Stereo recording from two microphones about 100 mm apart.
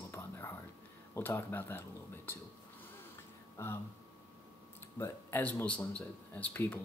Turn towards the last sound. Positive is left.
turn(degrees=15)  # may be behind; listen again after turning